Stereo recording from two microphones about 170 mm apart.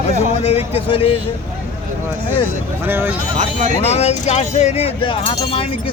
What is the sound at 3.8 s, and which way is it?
Speech, 40° left (ahead or behind).